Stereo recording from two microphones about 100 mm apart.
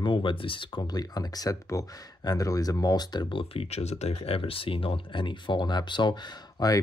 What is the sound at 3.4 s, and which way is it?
Speech, 75° left (ahead or behind).